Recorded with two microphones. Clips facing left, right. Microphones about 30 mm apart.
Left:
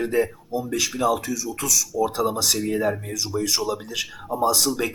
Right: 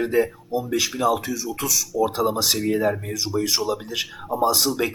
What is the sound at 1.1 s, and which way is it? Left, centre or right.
Speech, right.